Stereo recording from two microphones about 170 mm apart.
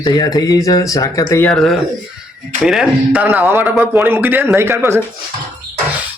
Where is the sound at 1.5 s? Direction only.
Centre (ahead or behind); by 5.0 s 15° right (ahead or behind).